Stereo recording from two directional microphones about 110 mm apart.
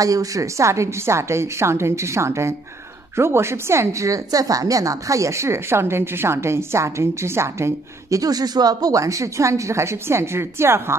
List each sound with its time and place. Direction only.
0.0 s a woman's voice: 30° right (ahead or behind)